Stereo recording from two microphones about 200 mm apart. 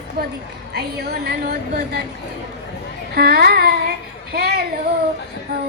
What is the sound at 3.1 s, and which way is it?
A child's voice, 50° right (ahead or behind).